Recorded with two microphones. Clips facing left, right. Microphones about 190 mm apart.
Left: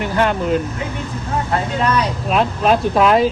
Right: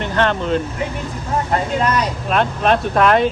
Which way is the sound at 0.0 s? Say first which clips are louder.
Left 1 dB; 10° left (ahead or behind).